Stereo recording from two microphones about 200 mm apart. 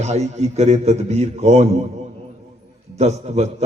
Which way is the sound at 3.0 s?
35° right (ahead or behind).